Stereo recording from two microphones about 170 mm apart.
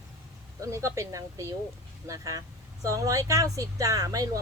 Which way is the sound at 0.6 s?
20° right (ahead or behind).